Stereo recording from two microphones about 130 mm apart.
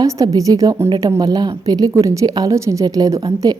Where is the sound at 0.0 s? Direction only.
25° right (ahead or behind).